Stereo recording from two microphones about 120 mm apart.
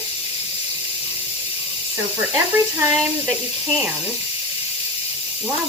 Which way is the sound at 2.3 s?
15° right (ahead or behind).